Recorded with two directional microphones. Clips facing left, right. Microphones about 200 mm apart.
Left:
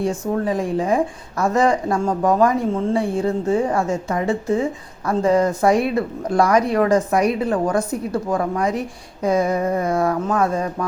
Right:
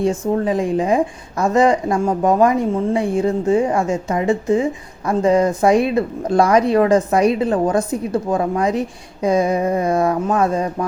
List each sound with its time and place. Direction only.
0.0 s a woman's voice: 20° right (ahead or behind)